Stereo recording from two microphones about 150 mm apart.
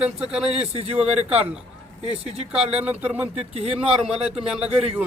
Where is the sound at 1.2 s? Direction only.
10° right (ahead or behind).